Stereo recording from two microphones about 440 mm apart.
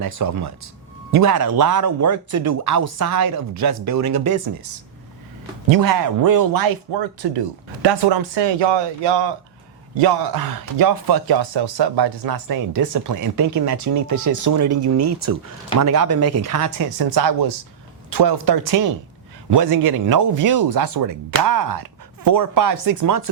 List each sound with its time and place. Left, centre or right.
0.0 s speech: right
5.6 s speech: right
10.0 s speech: right
15.8 s speech: right
16.0 s speech: right
16.4 s speech: right
17.0 s speech: right
18.1 s speech: right